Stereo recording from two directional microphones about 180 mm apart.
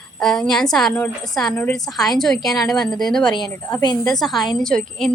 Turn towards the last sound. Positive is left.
turn(degrees=5)  # may be behind; listen again after turning